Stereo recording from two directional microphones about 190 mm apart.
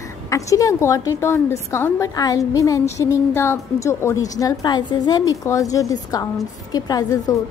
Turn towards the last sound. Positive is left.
turn(degrees=20)  # may be behind; listen again after turning